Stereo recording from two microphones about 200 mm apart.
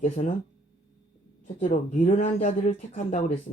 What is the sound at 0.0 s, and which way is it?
Speech, 35° left (ahead or behind).